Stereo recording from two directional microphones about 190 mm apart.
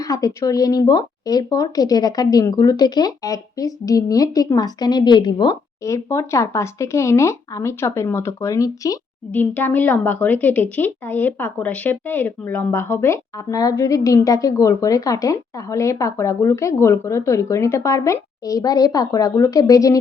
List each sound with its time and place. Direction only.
0.0 s speech: 20° left (ahead or behind)